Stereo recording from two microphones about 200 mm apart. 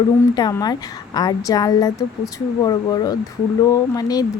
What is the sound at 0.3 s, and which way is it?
A woman's voice, 20° left (ahead or behind).